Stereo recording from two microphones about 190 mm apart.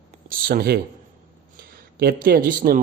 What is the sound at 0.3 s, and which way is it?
Speech, 50° right (ahead or behind).